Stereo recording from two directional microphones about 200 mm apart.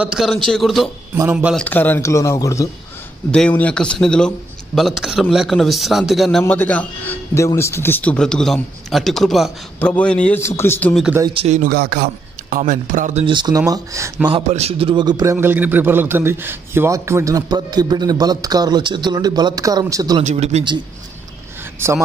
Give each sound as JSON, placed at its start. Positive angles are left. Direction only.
{"t": 0.0, "sound": "a man's voice", "side_deg": 0}
{"t": 1.6, "sound": "a man's voice", "side_deg": 10}
{"t": 3.3, "sound": "a man's voice", "side_deg": 5}
{"t": 11.2, "sound": "speech", "side_deg": -30}
{"t": 13.3, "sound": "speech", "side_deg": -20}
{"t": 14.3, "sound": "a man's voice", "side_deg": -30}
{"t": 15.3, "sound": "a man's voice", "side_deg": -10}
{"t": 20.2, "sound": "speech", "side_deg": -35}
{"t": 21.7, "sound": "speech", "side_deg": -10}